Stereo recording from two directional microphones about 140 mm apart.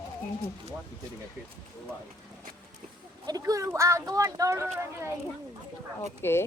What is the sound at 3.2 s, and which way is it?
A child's voice, 25° right (ahead or behind).